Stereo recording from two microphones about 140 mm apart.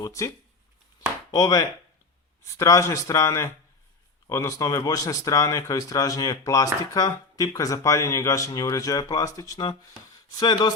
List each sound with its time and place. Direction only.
0.0 s speech: 20° left (ahead or behind)
1.3 s speech: 25° left (ahead or behind)